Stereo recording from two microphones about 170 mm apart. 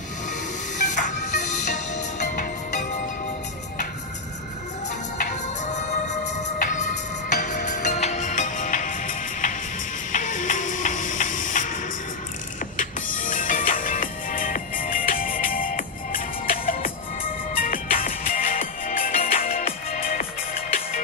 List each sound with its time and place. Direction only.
0.7 s music: 45° left (ahead or behind)
5.2 s music: 45° left (ahead or behind)